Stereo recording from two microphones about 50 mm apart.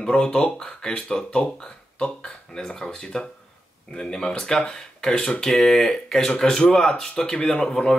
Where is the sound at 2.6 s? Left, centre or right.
Centre.